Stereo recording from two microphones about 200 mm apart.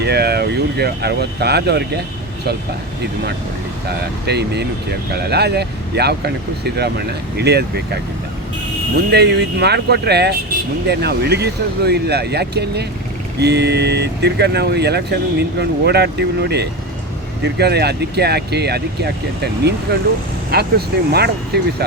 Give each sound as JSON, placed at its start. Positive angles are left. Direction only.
{"t": 0.0, "sound": "speech", "side_deg": -55}
{"t": 3.8, "sound": "speech", "side_deg": -55}
{"t": 9.1, "sound": "speech", "side_deg": -55}